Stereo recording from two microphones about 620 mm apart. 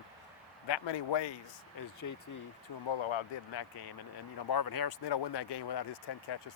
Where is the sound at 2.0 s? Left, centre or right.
Left.